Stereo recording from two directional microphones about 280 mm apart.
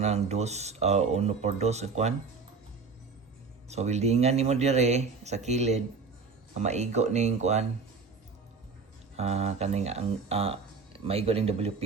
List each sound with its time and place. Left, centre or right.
0.0 s speech: right
3.7 s speech: right
9.1 s speech: right